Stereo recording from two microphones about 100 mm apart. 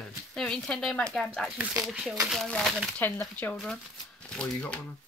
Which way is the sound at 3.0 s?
20° left (ahead or behind).